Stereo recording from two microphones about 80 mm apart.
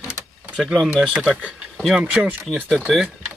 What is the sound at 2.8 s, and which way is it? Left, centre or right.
Speech, centre.